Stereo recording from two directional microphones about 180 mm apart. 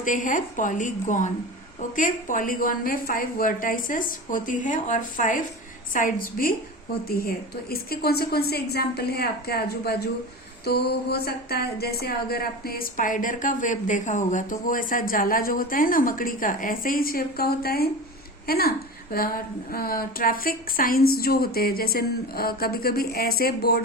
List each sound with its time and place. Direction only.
0.0 s a woman's voice: 45° left (ahead or behind)